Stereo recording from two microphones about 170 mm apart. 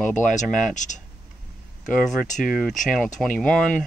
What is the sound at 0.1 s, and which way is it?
Speech, 45° left (ahead or behind).